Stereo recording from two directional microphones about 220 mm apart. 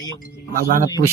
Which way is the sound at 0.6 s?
35° right (ahead or behind).